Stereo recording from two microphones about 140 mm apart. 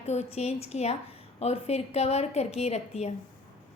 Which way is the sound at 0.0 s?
50° left (ahead or behind).